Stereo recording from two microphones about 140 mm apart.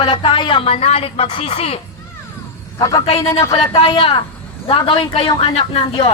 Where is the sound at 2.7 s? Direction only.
25° left (ahead or behind).